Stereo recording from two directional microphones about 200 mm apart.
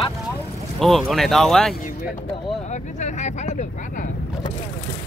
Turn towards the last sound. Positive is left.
turn(degrees=35)  # may be behind; listen again after turning